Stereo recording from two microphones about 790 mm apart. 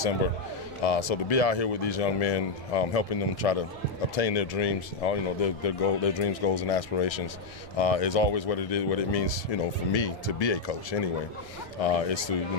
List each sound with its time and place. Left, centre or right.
0.8 s speech: left